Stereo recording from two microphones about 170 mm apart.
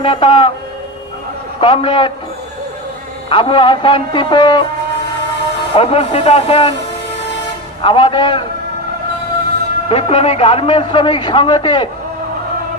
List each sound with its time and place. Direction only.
0.0 s speech: 30° left (ahead or behind)
1.6 s a man's voice: 30° left (ahead or behind)
3.2 s a man's voice: 30° left (ahead or behind)
5.7 s speech: 35° left (ahead or behind)
7.8 s a man's voice: 30° left (ahead or behind)
9.9 s a man's voice: 35° left (ahead or behind)